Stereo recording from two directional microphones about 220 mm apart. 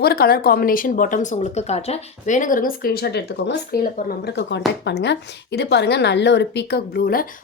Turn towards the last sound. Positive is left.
turn(degrees=40)  # may be behind; listen again after turning